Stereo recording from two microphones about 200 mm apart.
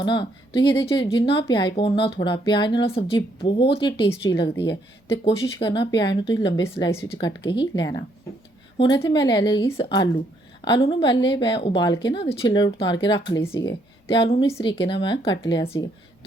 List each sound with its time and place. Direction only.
0.0 s speech: 25° left (ahead or behind)
4.1 s speech: 15° left (ahead or behind)
5.5 s speech: 25° left (ahead or behind)